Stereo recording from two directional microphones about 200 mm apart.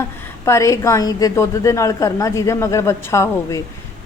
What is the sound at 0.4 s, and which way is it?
A woman's voice, 15° left (ahead or behind).